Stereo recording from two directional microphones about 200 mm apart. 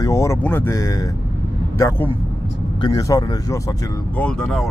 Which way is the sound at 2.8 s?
20° left (ahead or behind).